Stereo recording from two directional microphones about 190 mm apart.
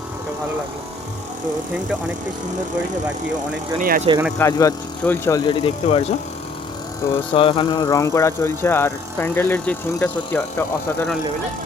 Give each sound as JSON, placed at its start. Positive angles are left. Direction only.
{"t": 3.8, "sound": "speech", "side_deg": -45}
{"t": 4.4, "sound": "speech", "side_deg": 15}
{"t": 7.0, "sound": "speech", "side_deg": 15}
{"t": 7.3, "sound": "speech", "side_deg": 25}